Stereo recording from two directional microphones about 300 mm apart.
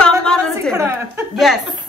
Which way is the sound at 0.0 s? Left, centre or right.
Centre.